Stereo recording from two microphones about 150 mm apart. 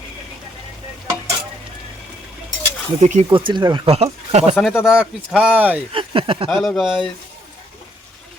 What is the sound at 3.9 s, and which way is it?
Speech, 45° right (ahead or behind).